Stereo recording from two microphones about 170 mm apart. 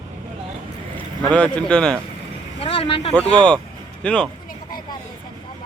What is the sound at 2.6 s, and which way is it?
Vehicle, 35° left (ahead or behind).